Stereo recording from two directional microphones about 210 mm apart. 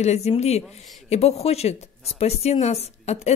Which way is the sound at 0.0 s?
30° left (ahead or behind).